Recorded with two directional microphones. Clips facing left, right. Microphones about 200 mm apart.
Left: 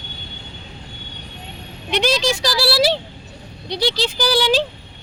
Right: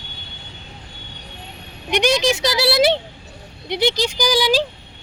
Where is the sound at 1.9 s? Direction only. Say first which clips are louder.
Right 2 dB; 15° right (ahead or behind).